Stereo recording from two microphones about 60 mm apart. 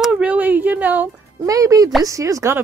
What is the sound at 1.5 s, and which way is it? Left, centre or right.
Speech, right.